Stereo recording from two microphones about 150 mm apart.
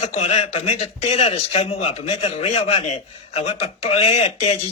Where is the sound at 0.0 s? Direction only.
45° left (ahead or behind).